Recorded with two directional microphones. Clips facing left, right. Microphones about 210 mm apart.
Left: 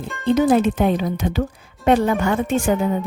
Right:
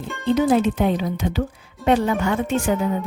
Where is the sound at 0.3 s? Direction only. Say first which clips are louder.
Left 2 dB; 50° left (ahead or behind).